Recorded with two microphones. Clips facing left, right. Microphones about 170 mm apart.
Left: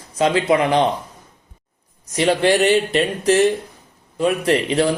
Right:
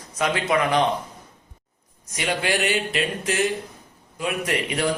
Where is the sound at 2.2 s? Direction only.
35° left (ahead or behind).